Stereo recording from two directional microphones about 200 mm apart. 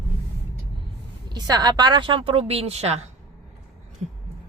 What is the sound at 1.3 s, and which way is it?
A woman's voice, 20° right (ahead or behind).